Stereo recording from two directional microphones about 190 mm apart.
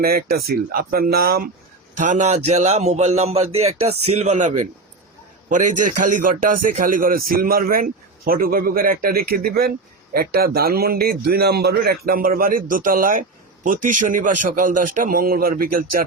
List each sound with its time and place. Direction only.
0.0 s a man's voice: 50° right (ahead or behind)
2.0 s a man's voice: 40° right (ahead or behind)